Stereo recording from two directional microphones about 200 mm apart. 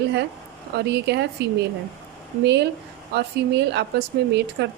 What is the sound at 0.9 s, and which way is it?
Speech, 55° right (ahead or behind).